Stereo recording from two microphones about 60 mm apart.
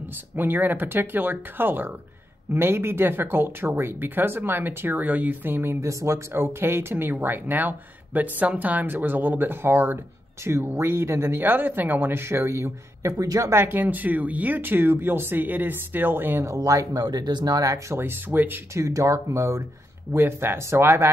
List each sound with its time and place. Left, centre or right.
0.4 s speech: right
5.8 s speech: right
6.3 s speech: right
13.2 s speech: right
13.6 s speech: right
16.5 s speech: right
17.9 s speech: right
18.8 s speech: right
20.1 s speech: right